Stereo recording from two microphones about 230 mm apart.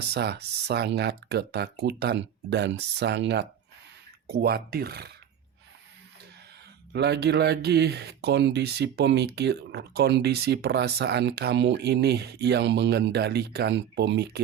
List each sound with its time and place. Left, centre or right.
0.0 s speech: right
6.9 s speech: right